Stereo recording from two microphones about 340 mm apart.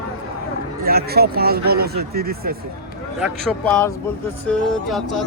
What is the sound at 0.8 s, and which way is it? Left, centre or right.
Speech, right.